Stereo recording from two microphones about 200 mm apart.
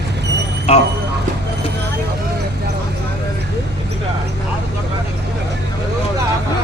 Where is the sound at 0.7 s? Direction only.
30° left (ahead or behind).